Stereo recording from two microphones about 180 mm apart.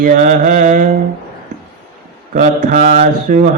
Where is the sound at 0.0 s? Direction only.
50° right (ahead or behind).